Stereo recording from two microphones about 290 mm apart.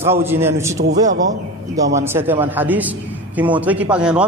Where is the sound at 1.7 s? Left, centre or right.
Centre.